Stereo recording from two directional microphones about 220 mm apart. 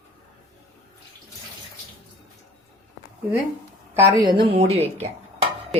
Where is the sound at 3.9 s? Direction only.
15° right (ahead or behind).